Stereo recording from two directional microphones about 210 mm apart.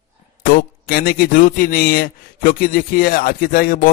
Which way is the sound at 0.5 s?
45° left (ahead or behind).